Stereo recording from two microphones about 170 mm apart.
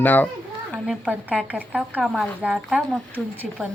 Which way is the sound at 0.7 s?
5° right (ahead or behind).